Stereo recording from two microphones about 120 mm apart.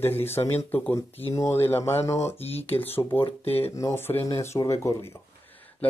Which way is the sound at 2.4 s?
60° left (ahead or behind).